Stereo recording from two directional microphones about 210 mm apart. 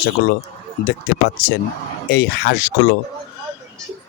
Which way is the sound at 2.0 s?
50° left (ahead or behind).